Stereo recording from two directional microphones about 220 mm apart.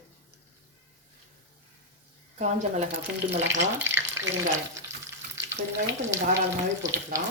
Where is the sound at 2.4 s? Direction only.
35° right (ahead or behind).